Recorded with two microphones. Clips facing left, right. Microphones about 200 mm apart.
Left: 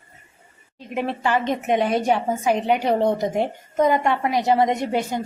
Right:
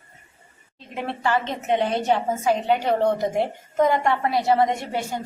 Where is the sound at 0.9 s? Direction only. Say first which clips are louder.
Left 2 dB; 15° left (ahead or behind).